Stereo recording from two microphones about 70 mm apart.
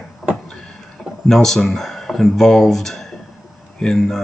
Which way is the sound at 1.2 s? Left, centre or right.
Centre.